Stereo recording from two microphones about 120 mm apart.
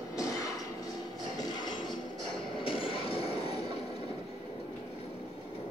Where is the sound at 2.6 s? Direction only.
50° left (ahead or behind).